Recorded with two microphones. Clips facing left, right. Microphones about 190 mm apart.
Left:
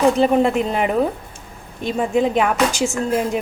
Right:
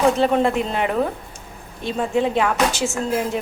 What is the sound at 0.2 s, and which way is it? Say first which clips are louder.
A woman's voice: left 2 dB; 15° left (ahead or behind).